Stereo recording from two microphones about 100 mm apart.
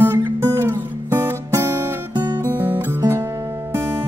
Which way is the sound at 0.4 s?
25° right (ahead or behind).